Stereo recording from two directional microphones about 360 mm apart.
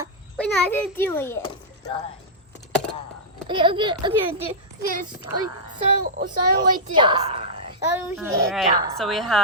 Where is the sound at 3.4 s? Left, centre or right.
Centre.